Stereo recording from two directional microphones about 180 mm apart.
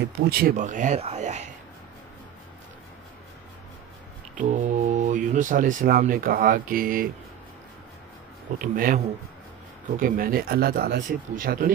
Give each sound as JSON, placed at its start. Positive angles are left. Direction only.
{"t": 0.3, "sound": "speech", "side_deg": -55}
{"t": 4.4, "sound": "speech", "side_deg": -45}
{"t": 8.5, "sound": "speech", "side_deg": -50}